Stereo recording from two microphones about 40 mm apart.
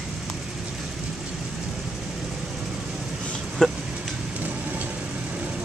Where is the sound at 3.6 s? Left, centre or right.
Centre.